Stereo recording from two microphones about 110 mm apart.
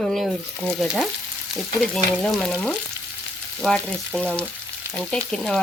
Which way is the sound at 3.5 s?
5° left (ahead or behind).